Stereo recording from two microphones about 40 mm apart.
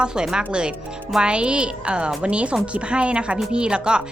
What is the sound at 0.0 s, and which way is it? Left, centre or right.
Speech, right.